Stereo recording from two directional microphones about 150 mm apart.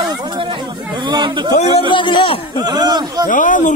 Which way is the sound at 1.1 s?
30° right (ahead or behind).